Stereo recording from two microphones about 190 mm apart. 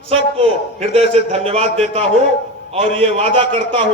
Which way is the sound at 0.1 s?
30° right (ahead or behind).